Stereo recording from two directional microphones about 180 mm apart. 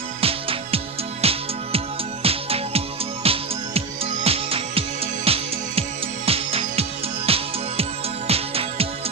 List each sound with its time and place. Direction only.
0.2 s music: 30° right (ahead or behind)